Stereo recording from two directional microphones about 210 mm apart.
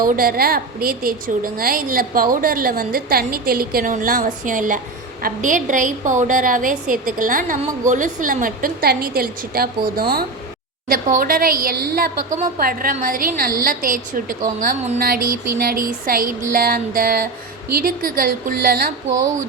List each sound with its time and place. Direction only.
0.0 s a woman's voice: 45° right (ahead or behind)